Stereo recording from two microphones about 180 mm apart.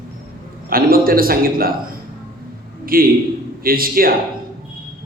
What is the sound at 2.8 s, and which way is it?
A man's voice, 55° right (ahead or behind).